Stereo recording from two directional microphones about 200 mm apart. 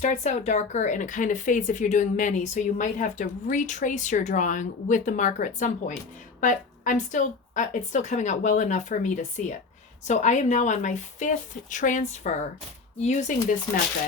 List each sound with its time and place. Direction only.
0.0 s speech: 35° left (ahead or behind)